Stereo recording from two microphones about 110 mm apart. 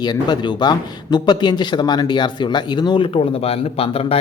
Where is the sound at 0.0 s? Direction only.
40° left (ahead or behind).